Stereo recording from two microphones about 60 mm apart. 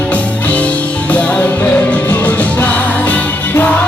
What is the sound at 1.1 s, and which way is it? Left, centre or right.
Music, left.